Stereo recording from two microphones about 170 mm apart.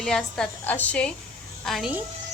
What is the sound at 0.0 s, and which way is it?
A woman's voice, 5° left (ahead or behind).